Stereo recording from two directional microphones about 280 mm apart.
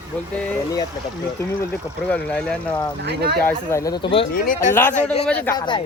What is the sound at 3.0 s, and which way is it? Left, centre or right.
Speech, right.